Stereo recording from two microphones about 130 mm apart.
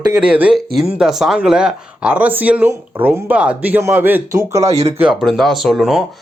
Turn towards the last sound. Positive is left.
turn(degrees=0)  # may be behind; listen again after turning